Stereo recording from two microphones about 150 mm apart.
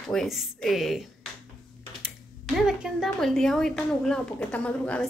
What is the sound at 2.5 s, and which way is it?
A woman's voice, 5° right (ahead or behind).